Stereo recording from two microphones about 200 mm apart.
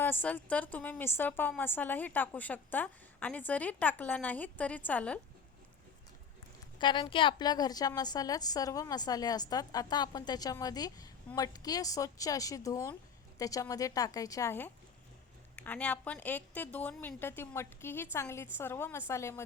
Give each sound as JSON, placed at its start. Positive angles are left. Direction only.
{"t": 0.0, "sound": "a woman's voice", "side_deg": 10}
{"t": 6.7, "sound": "a woman's voice", "side_deg": 25}